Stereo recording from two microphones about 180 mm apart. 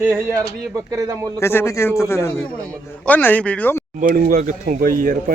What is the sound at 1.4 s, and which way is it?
A man's voice, 15° left (ahead or behind).